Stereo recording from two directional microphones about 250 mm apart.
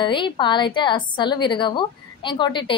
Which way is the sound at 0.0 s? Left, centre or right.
Centre.